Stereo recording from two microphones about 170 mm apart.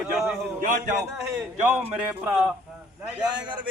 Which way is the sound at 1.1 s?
10° right (ahead or behind).